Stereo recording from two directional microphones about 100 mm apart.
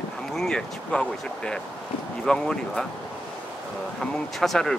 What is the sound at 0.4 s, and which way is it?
Speech, 5° left (ahead or behind).